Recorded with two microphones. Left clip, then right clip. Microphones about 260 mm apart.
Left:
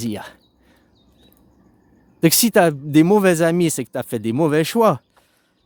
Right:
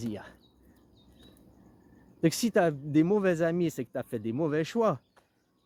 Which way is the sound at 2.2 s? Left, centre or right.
Left.